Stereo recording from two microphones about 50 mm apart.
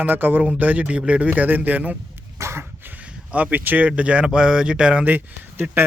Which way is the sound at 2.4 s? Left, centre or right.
Right.